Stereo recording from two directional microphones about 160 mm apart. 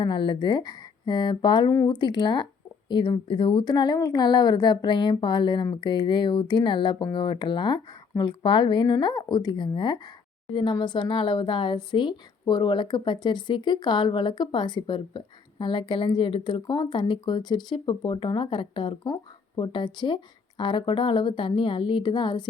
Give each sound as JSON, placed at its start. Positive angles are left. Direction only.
{"t": 0.0, "sound": "a woman's voice", "side_deg": 30}